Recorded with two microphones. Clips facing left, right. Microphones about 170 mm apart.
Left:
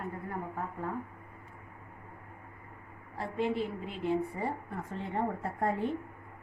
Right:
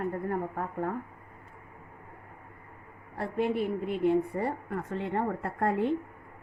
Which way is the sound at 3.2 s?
55° right (ahead or behind).